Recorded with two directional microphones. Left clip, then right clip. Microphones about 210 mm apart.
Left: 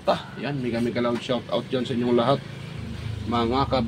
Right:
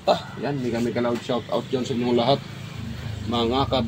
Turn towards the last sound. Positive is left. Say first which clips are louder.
# right 1 dB
turn(degrees=0)  # may be behind; listen again after turning